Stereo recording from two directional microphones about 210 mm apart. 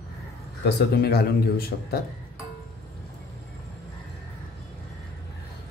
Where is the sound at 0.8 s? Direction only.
50° left (ahead or behind).